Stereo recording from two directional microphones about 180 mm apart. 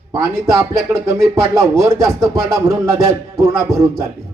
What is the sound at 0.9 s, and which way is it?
Speech, 15° right (ahead or behind).